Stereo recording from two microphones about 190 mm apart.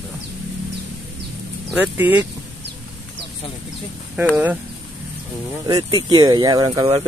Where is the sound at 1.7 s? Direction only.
10° right (ahead or behind).